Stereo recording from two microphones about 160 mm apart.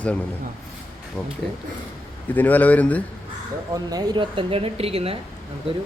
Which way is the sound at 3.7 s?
25° right (ahead or behind).